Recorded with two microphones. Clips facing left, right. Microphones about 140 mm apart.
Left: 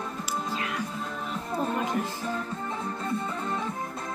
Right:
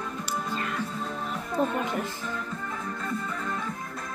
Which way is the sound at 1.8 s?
35° left (ahead or behind).